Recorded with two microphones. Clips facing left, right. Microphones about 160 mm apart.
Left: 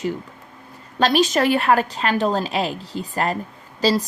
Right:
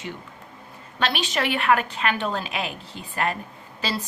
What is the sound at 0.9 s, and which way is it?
A woman's voice, 40° left (ahead or behind).